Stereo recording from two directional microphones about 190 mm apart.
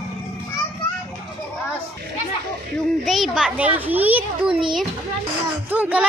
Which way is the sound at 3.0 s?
Centre (ahead or behind).